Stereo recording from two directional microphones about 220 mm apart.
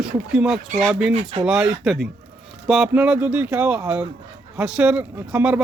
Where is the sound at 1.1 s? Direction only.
30° right (ahead or behind).